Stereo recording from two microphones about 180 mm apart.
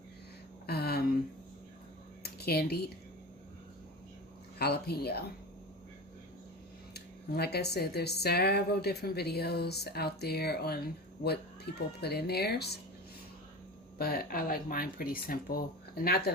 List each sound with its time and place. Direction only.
0.7 s a sound: 60° left (ahead or behind)
2.2 s speech: 60° left (ahead or behind)
4.5 s speech: 65° left (ahead or behind)
6.9 s speech: 65° left (ahead or behind)
14.0 s speech: 55° left (ahead or behind)